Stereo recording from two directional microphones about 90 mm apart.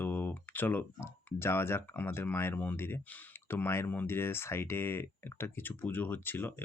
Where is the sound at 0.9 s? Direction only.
30° left (ahead or behind).